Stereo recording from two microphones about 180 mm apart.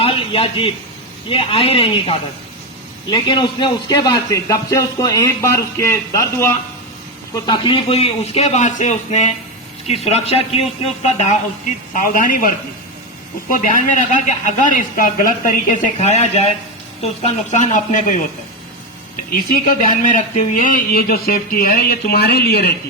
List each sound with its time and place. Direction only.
0.0 s a sound: 30° left (ahead or behind)
1.3 s a man's voice: 30° left (ahead or behind)
11.9 s speech: 50° left (ahead or behind)
13.5 s speech: 45° left (ahead or behind)
16.0 s a man's voice: 35° left (ahead or behind)
19.5 s speech: 50° left (ahead or behind)